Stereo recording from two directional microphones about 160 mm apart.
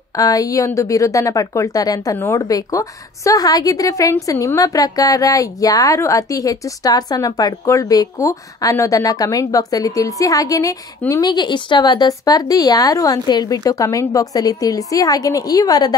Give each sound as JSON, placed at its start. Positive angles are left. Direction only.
{"t": 0.2, "sound": "a woman's voice", "side_deg": 20}